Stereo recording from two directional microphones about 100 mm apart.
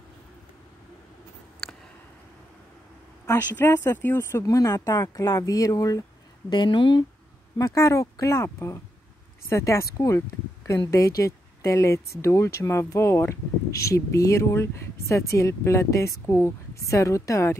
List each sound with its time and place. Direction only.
1.6 s a sound: 5° left (ahead or behind)
3.3 s speech: 25° left (ahead or behind)
6.5 s speech: 50° left (ahead or behind)
7.5 s speech: 35° left (ahead or behind)